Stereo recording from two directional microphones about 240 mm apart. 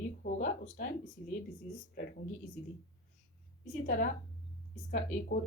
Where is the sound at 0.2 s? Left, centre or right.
Left.